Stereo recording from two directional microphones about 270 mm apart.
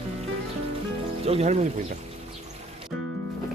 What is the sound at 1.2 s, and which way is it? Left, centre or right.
Speech, right.